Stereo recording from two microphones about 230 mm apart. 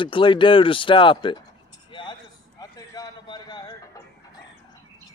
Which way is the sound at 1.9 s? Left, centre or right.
Left.